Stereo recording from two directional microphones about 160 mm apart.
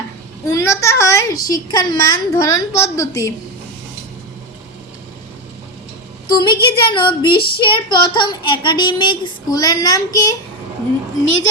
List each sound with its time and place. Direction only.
0.4 s a child's voice: 20° left (ahead or behind)
6.2 s a child's voice: 25° left (ahead or behind)